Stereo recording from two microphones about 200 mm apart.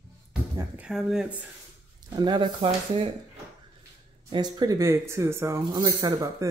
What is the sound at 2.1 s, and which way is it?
Speech, 20° right (ahead or behind).